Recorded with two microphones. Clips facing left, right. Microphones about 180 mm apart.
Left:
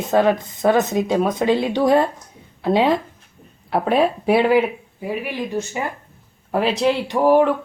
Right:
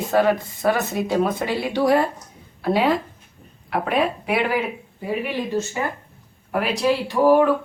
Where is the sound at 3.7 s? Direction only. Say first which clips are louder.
Left 4 dB; 30° left (ahead or behind).